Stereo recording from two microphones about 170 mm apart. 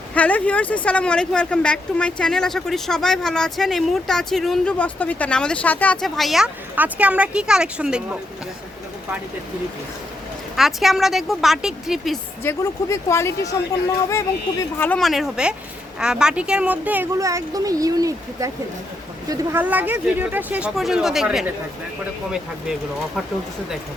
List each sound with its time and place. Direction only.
0.1 s speech: 10° left (ahead or behind)
10.5 s speech: centre (ahead or behind)
12.4 s speech: 15° left (ahead or behind); by 21.5 s 5° right (ahead or behind)